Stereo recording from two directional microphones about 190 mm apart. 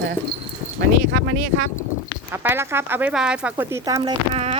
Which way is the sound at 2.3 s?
10° right (ahead or behind).